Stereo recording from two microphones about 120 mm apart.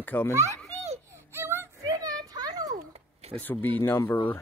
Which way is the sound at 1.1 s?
20° right (ahead or behind).